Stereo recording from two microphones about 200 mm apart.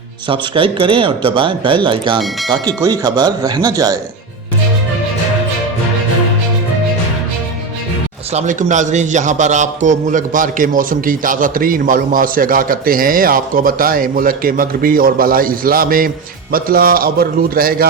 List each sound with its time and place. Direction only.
0.3 s speech: 25° right (ahead or behind)
8.3 s a man's voice: 35° right (ahead or behind)